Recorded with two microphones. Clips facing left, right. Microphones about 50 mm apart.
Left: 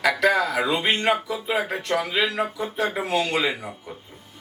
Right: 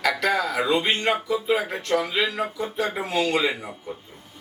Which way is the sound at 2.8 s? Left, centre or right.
Left.